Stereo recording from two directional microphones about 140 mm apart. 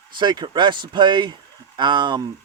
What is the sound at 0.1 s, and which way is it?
Speech, 35° right (ahead or behind).